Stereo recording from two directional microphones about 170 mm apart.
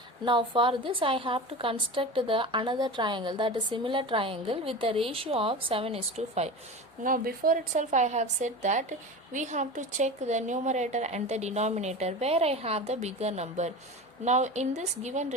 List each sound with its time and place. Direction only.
0.3 s a woman's voice: 30° right (ahead or behind)
7.0 s a woman's voice: 55° right (ahead or behind)